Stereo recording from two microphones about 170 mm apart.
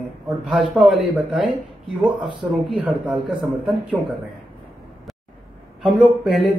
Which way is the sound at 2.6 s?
5° right (ahead or behind).